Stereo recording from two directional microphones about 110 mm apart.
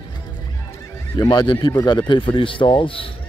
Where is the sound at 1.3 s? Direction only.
40° left (ahead or behind).